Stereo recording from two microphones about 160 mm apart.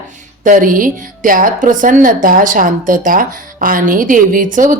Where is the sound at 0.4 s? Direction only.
60° right (ahead or behind).